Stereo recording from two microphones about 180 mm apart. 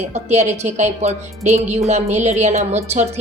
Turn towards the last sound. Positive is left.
turn(degrees=-40)  # may be behind; listen again after turning